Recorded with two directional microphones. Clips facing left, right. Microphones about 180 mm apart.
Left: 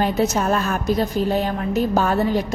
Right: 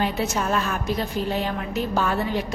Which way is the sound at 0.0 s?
40° left (ahead or behind).